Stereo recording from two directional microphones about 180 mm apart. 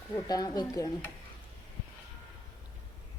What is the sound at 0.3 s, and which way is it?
Speech, 20° left (ahead or behind).